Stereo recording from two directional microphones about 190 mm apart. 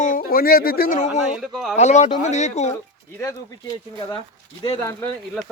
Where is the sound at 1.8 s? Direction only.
35° left (ahead or behind).